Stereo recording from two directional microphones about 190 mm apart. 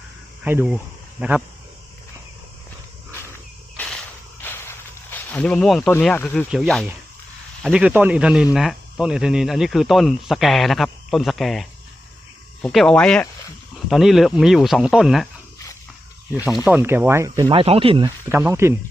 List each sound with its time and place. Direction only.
0.4 s speech: 10° right (ahead or behind)
3.8 s cricket: 5° left (ahead or behind)
4.4 s a sound: 10° left (ahead or behind)
5.9 s speech: 5° left (ahead or behind)
16.6 s speech: 10° right (ahead or behind); by 18.1 s 30° right (ahead or behind)
18.3 s speech: 10° right (ahead or behind)